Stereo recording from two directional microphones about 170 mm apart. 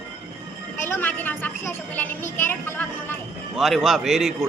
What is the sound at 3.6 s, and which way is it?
Speech, centre (ahead or behind).